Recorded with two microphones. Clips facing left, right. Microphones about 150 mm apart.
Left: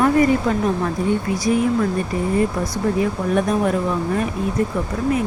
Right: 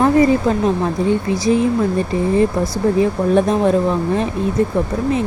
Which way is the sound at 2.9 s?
30° right (ahead or behind).